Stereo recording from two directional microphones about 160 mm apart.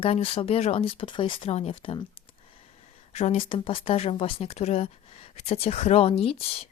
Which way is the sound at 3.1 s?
40° left (ahead or behind).